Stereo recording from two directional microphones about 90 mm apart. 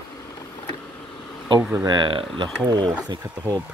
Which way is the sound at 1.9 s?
60° right (ahead or behind).